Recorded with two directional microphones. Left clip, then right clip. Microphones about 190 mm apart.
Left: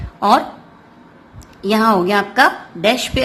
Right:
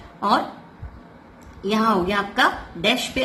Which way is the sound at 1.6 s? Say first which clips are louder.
Left 6 dB; 45° left (ahead or behind).